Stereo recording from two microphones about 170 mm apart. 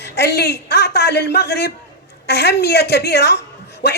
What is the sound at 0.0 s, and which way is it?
A man's voice, 80° left.